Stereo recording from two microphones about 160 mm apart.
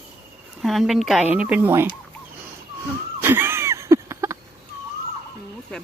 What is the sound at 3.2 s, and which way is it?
Wheeze, 15° right (ahead or behind).